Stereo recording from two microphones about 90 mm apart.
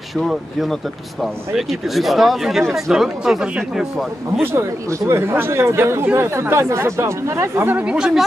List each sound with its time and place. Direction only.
0.1 s speech: centre (ahead or behind)
4.4 s speech: 25° right (ahead or behind)
7.8 s speech: 10° right (ahead or behind)